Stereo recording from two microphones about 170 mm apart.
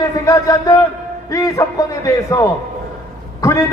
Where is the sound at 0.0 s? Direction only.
20° left (ahead or behind).